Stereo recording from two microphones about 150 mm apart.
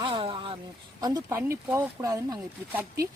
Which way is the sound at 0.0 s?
35° right (ahead or behind).